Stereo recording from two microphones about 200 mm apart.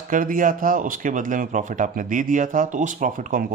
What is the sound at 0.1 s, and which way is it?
A man's voice, 45° right (ahead or behind).